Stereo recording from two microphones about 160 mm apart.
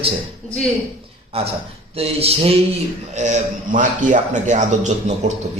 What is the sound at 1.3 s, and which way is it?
A man's voice, 40° right (ahead or behind).